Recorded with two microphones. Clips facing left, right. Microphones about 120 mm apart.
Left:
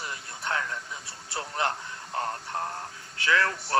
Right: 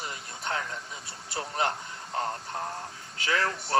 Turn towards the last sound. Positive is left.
turn(degrees=-25)  # may be behind; listen again after turning